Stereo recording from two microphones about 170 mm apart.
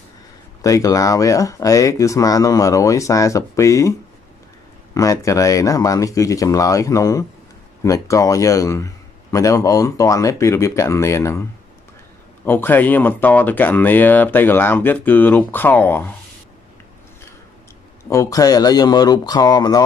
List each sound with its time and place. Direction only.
0.6 s a man's voice: 20° left (ahead or behind)
4.9 s a man's voice: 20° left (ahead or behind)
12.4 s speech: 10° left (ahead or behind)
18.1 s a man's voice: 20° left (ahead or behind)